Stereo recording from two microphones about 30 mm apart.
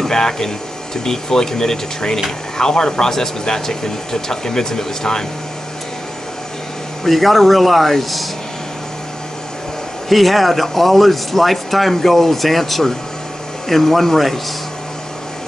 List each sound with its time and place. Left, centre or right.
0.1 s speech: centre
7.1 s speech: centre
10.0 s speech: centre